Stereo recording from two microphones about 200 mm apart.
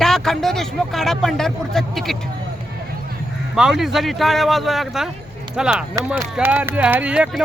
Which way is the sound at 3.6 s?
Centre (ahead or behind).